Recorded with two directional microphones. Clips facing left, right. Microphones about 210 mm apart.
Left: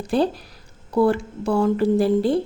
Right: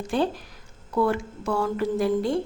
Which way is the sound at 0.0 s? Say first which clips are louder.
Left 4 dB; 35° left (ahead or behind).